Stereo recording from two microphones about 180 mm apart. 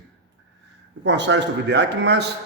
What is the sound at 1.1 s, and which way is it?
A man's voice, 75° right (ahead or behind).